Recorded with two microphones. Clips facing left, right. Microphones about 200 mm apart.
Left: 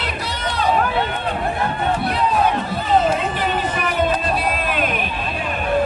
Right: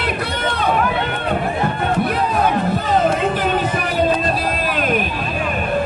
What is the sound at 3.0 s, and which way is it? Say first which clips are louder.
Music: right 3 dB; 55° right (ahead or behind).